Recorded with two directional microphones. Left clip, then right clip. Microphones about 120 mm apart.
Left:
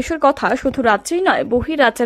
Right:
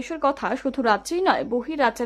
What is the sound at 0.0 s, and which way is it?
A woman's voice, 50° left (ahead or behind).